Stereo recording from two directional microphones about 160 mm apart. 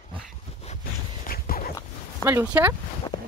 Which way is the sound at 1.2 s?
65° left (ahead or behind).